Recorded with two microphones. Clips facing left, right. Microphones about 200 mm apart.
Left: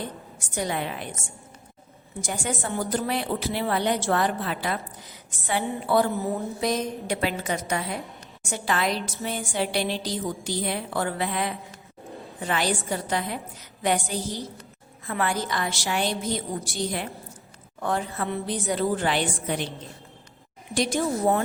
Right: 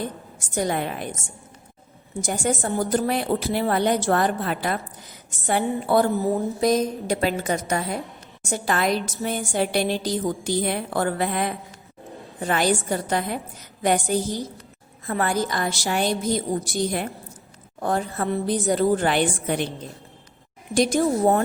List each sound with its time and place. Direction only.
0.3 s a woman's voice: 45° right (ahead or behind)
2.2 s a woman's voice: 45° right (ahead or behind)
5.8 s a woman's voice: 45° right (ahead or behind)
20.7 s a woman's voice: 40° right (ahead or behind)